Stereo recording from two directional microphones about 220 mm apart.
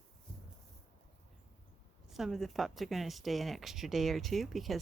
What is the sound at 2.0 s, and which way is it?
Speech, centre (ahead or behind).